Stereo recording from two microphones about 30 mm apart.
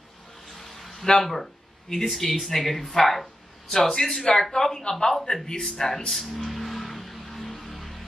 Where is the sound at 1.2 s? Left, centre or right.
Centre.